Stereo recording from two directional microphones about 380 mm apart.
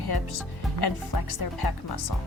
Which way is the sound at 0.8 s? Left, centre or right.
Left.